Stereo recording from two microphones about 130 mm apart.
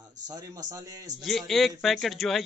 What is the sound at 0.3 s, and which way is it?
Speech, 30° right (ahead or behind).